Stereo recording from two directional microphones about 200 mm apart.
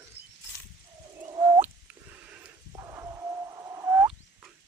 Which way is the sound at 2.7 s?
15° right (ahead or behind).